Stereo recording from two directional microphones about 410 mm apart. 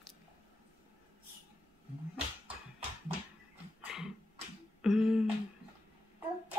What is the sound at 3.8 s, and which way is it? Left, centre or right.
Dog, centre.